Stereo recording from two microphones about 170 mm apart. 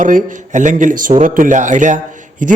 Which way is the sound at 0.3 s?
45° right (ahead or behind).